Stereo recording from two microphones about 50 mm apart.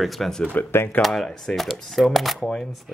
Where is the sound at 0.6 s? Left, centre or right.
Left.